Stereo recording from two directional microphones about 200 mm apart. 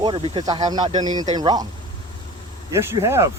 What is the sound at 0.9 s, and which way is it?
Speech, 35° right (ahead or behind).